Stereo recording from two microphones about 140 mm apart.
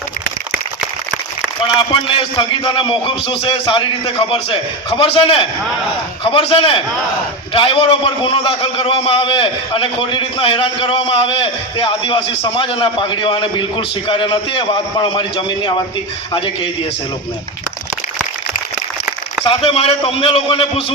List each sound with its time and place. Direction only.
1.6 s a man's voice: 35° left (ahead or behind)
19.5 s a man's voice: 40° left (ahead or behind)